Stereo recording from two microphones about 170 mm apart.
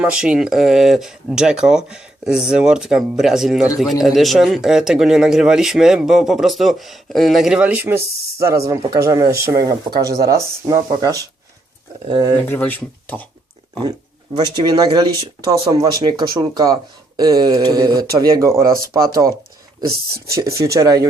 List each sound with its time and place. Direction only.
0.0 s speech: 5° right (ahead or behind)
12.5 s speech: 10° left (ahead or behind)
14.3 s speech: 25° right (ahead or behind)
20.3 s speech: 20° right (ahead or behind)